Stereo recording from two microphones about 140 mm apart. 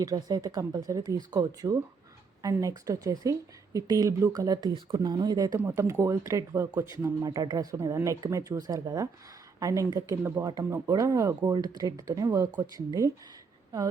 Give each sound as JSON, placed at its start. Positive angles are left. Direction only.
{"t": 0.0, "sound": "speech", "side_deg": -25}